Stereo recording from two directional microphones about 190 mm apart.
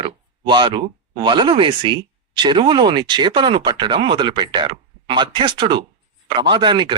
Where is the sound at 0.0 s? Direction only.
25° right (ahead or behind).